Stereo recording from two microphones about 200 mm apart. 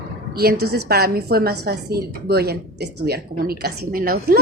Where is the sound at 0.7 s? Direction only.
55° right (ahead or behind).